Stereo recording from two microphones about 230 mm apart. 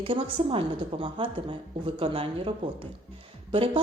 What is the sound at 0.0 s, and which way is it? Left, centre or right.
A woman's voice, right.